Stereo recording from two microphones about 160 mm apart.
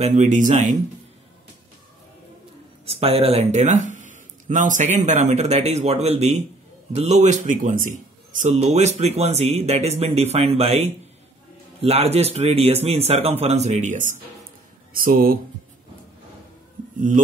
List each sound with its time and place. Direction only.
0.0 s speech: 45° right (ahead or behind)
2.8 s speech: 40° right (ahead or behind)
15.0 s speech: 60° right (ahead or behind)